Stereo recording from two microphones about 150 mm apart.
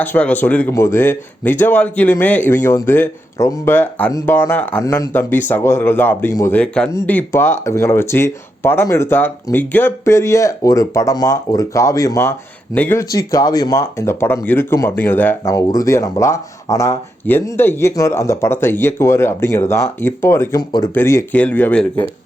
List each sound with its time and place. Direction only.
0.0 s speech: 10° left (ahead or behind)
4.8 s speech: 25° left (ahead or behind)
6.6 s speech: 5° left (ahead or behind)